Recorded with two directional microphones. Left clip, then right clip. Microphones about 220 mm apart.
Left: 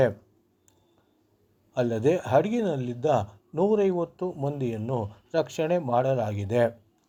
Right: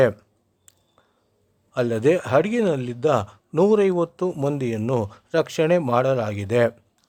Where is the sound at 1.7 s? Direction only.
25° right (ahead or behind).